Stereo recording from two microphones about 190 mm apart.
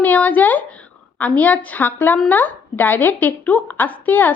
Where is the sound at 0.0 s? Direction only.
10° left (ahead or behind).